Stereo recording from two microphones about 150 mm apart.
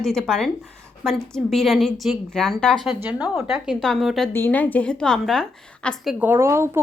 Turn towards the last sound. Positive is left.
turn(degrees=-15)  # may be behind; listen again after turning